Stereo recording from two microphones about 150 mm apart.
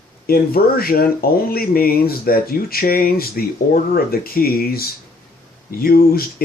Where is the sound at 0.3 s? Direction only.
80° left.